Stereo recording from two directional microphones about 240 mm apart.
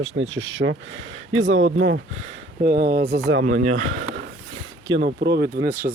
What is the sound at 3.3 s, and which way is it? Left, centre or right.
Speech, right.